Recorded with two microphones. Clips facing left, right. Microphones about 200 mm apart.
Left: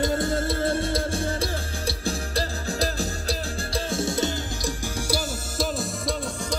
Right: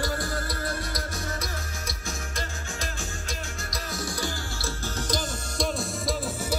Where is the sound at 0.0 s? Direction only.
25° left (ahead or behind).